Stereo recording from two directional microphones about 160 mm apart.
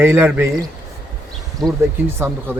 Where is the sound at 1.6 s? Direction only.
Centre (ahead or behind).